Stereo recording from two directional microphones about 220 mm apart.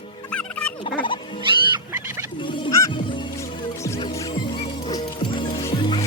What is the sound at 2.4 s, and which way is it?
Goose, 20° left (ahead or behind).